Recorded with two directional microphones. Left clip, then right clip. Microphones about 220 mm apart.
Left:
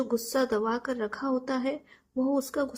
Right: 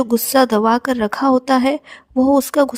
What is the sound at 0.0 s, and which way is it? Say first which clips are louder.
A woman's voice: right 13 dB; 45° right (ahead or behind).